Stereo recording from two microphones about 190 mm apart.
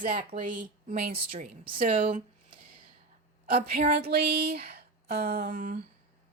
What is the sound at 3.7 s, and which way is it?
A woman's voice, 45° right (ahead or behind).